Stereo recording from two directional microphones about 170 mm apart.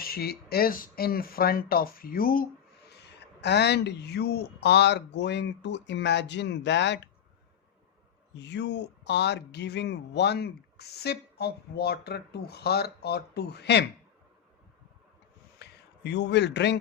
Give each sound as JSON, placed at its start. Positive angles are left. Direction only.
{"t": 0.0, "sound": "speech", "side_deg": 65}
{"t": 2.9, "sound": "speech", "side_deg": 80}
{"t": 8.4, "sound": "speech", "side_deg": 90}
{"t": 15.6, "sound": "a sound", "side_deg": 80}
{"t": 16.0, "sound": "speech", "side_deg": 90}